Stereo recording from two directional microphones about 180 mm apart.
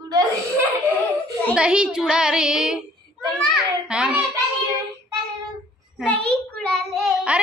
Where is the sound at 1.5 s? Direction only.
5° right (ahead or behind).